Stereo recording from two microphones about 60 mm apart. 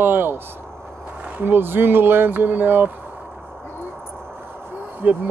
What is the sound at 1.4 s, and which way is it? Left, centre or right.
Speech, right.